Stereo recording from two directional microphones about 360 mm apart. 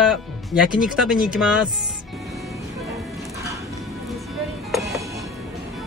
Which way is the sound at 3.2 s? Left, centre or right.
Centre.